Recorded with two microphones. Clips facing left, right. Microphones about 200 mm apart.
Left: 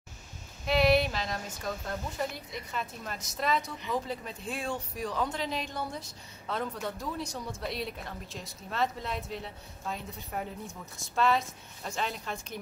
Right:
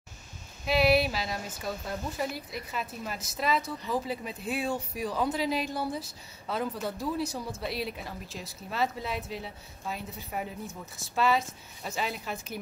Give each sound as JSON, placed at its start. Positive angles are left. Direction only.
{"t": 0.7, "sound": "speech", "side_deg": -5}